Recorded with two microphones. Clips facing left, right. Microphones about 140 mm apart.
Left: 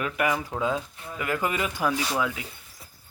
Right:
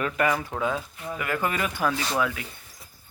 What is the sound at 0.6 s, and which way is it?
Speech, 20° left (ahead or behind).